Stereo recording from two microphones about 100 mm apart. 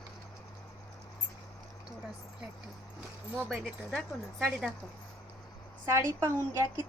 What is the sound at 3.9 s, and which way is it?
Speech, 5° left (ahead or behind).